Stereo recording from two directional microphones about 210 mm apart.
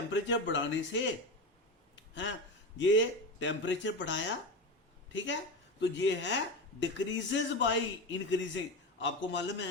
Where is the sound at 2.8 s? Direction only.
60° left (ahead or behind).